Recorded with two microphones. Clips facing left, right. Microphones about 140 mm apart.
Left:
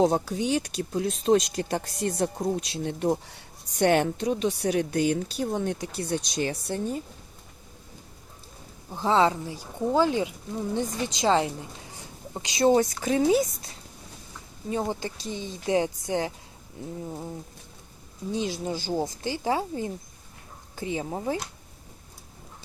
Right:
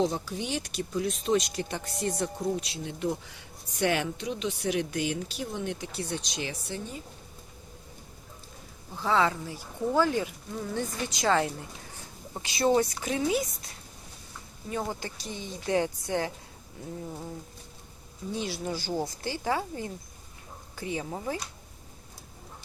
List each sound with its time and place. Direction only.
0.0 s speech: 50° left (ahead or behind)
0.8 s speech: 35° left (ahead or behind)
8.9 s speech: 25° left (ahead or behind)
13.0 s speech: 35° left (ahead or behind)
17.1 s bird: 15° left (ahead or behind)
18.3 s speech: 20° left (ahead or behind)